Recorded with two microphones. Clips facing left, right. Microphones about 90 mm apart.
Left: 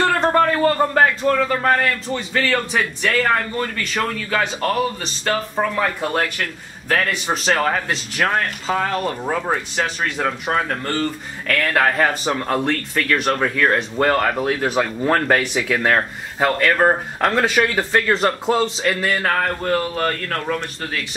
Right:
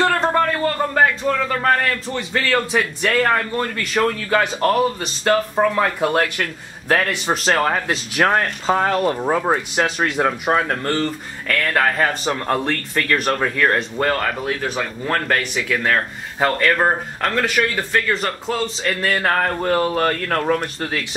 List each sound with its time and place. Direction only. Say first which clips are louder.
0.3 s a sound: left 2 dB; centre (ahead or behind)
0.7 s a man's voice: left 2 dB; 10° left (ahead or behind); by 8.0 s 10° right (ahead or behind)
8.6 s speech: right 6 dB; 25° right (ahead or behind); by 10.8 s 10° right (ahead or behind)
11.4 s a man's voice: left 1 dB; 5° left (ahead or behind)
17.2 s speech: left 2 dB; 20° left (ahead or behind); by 19.3 s centre (ahead or behind)
19.6 s speech: right 2 dB; 30° right (ahead or behind)